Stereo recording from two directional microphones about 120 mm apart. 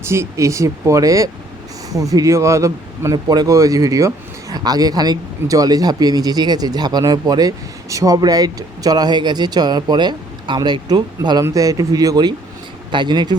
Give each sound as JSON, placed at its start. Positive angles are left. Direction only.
{"t": 0.0, "sound": "speech", "side_deg": -20}